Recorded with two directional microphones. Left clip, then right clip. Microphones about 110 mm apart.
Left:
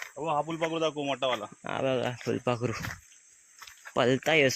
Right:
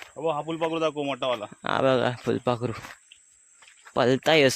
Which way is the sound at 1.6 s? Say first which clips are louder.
Right 8 dB; 90° right.